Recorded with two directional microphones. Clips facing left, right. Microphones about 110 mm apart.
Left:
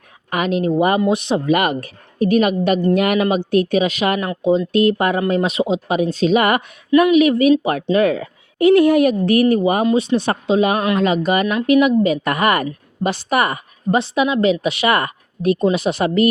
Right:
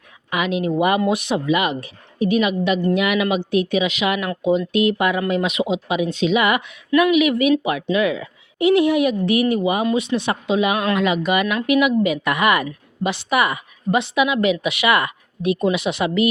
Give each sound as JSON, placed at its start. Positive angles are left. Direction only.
{"t": 0.3, "sound": "speech", "side_deg": 40}
{"t": 1.5, "sound": "a woman's voice", "side_deg": 50}
{"t": 4.3, "sound": "a woman's voice", "side_deg": 25}
{"t": 9.8, "sound": "speech", "side_deg": 30}